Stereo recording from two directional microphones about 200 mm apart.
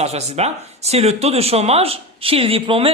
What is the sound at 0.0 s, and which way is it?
Speech, 35° right (ahead or behind).